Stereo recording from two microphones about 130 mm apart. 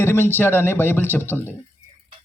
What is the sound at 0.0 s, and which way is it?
A man's voice, 20° left (ahead or behind).